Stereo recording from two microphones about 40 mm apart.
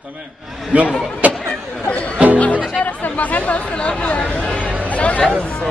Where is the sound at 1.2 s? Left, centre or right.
Right.